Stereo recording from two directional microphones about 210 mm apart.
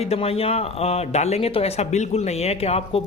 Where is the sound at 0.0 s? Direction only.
30° left (ahead or behind).